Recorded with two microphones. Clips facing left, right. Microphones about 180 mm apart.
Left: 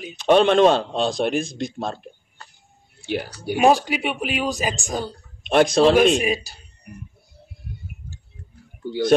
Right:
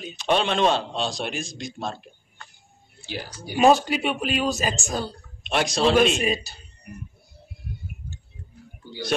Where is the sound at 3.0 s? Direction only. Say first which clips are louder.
Left 9 dB; 60° left (ahead or behind).